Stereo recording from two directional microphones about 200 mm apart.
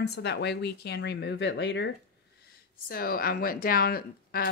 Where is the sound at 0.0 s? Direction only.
55° left (ahead or behind).